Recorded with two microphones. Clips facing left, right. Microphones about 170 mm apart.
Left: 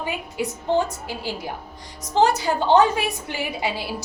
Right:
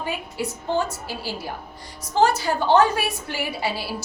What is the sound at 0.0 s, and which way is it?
A woman's voice, 15° left (ahead or behind).